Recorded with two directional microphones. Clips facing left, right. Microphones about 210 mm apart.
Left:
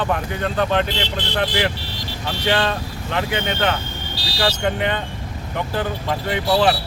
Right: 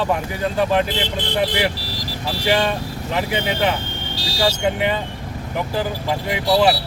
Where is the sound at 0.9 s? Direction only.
50° right (ahead or behind).